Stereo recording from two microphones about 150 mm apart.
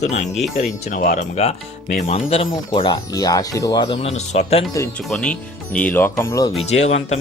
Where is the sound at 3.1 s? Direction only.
25° left (ahead or behind); by 4.6 s 45° left (ahead or behind).